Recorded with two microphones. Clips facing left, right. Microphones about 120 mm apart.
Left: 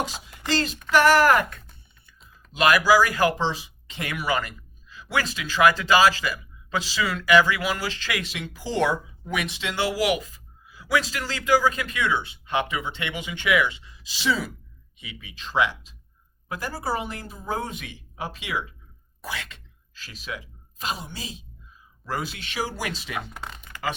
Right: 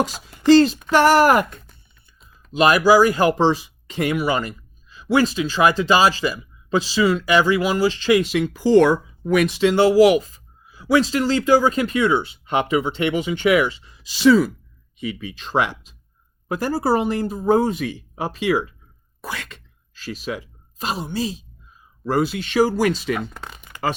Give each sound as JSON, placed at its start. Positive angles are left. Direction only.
{"t": 0.5, "sound": "speech", "side_deg": -35}
{"t": 3.3, "sound": "speech", "side_deg": -45}
{"t": 4.1, "sound": "speech", "side_deg": -30}
{"t": 8.2, "sound": "speech", "side_deg": -45}
{"t": 18.2, "sound": "speech", "side_deg": -40}
{"t": 20.8, "sound": "speech", "side_deg": -35}
{"t": 23.1, "sound": "speech", "side_deg": 5}